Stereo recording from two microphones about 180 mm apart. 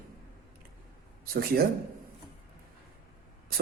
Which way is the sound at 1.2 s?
55° right (ahead or behind).